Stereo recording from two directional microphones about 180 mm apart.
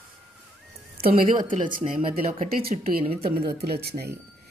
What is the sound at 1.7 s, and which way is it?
Speech, 50° right (ahead or behind).